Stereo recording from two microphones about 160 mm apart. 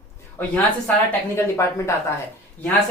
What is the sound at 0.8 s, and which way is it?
Speech, 15° left (ahead or behind).